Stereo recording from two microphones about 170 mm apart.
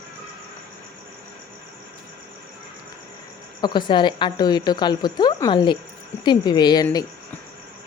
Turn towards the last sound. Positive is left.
turn(degrees=20)  # may be behind; listen again after turning